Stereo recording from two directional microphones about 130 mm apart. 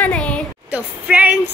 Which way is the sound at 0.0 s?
10° left (ahead or behind).